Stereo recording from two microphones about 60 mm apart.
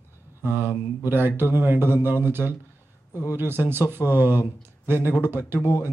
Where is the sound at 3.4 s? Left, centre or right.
Right.